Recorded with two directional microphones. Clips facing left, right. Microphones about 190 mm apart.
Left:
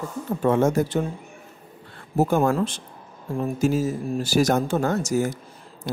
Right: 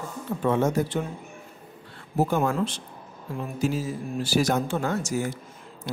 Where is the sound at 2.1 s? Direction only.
45° left (ahead or behind).